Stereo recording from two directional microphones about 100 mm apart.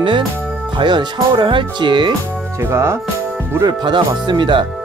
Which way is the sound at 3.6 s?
40° right (ahead or behind).